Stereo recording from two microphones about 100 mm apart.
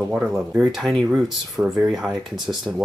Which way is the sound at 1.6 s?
25° right (ahead or behind).